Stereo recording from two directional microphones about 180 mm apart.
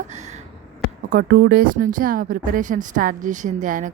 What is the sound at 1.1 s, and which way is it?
Speech, 55° right (ahead or behind).